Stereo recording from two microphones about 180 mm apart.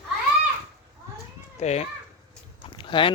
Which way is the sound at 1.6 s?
40° left (ahead or behind).